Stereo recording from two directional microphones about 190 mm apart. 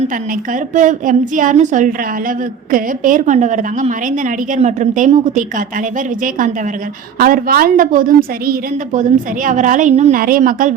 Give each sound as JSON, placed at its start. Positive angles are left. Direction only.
{"t": 0.7, "sound": "a woman's voice", "side_deg": -40}
{"t": 7.2, "sound": "a woman's voice", "side_deg": -50}